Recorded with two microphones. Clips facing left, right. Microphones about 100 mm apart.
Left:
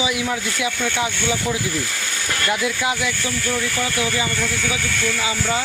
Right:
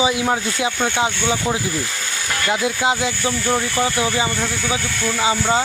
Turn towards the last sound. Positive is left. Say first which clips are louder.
# right 4 dB
turn(degrees=-30)  # may be behind; listen again after turning